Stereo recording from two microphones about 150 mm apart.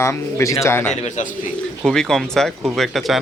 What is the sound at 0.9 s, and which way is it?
Speech, 55° left (ahead or behind).